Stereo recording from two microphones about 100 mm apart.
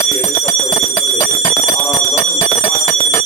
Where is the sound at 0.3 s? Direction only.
35° left (ahead or behind).